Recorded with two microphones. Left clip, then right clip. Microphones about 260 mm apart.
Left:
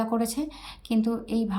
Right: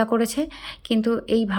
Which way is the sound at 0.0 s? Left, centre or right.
Centre.